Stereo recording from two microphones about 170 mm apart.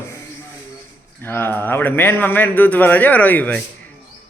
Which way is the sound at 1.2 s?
15° left (ahead or behind).